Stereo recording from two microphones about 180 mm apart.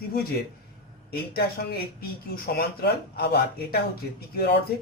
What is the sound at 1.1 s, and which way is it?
Speech, 55° left (ahead or behind).